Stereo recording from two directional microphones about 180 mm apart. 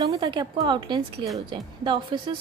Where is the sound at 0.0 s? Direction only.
20° right (ahead or behind).